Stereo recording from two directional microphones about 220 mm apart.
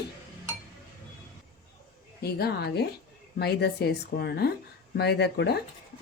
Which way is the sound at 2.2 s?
45° left (ahead or behind).